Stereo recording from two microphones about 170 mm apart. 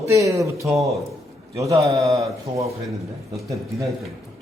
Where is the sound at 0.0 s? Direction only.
15° right (ahead or behind).